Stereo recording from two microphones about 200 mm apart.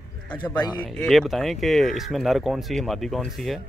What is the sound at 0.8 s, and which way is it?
Speech, 5° left (ahead or behind).